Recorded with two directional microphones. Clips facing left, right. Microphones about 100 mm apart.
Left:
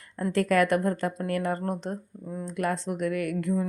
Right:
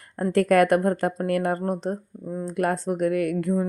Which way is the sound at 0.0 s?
45° right (ahead or behind).